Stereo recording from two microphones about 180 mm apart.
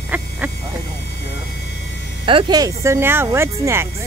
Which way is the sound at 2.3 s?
25° right (ahead or behind).